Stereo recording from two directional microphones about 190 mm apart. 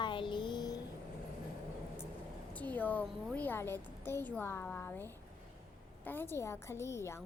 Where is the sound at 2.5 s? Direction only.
10° left (ahead or behind).